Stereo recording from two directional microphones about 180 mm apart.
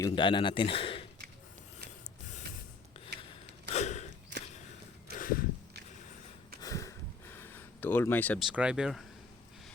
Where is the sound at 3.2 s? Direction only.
35° left (ahead or behind).